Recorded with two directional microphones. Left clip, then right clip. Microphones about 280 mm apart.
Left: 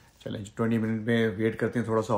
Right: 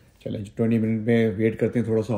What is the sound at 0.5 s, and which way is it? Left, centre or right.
Speech, right.